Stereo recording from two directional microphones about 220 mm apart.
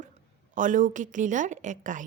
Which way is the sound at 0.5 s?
35° right (ahead or behind).